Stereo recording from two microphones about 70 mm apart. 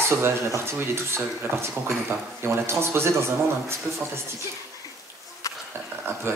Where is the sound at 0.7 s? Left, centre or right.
Right.